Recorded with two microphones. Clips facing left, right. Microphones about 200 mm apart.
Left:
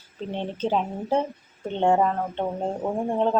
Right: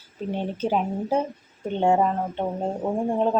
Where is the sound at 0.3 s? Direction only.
10° right (ahead or behind).